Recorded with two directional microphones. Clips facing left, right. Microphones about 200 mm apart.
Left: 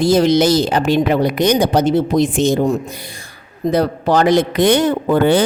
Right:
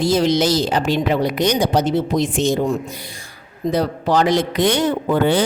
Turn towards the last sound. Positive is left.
turn(degrees=55)  # may be behind; listen again after turning